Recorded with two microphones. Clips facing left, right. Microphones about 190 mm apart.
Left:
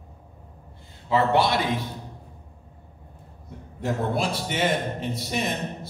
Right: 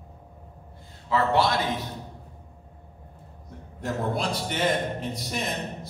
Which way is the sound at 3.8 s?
5° left (ahead or behind).